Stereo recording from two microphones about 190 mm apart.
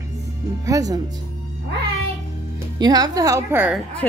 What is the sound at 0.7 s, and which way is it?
Speech, 20° right (ahead or behind).